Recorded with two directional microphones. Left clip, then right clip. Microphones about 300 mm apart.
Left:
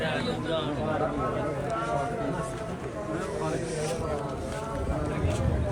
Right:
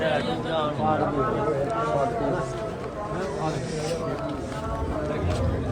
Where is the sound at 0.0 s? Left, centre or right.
Right.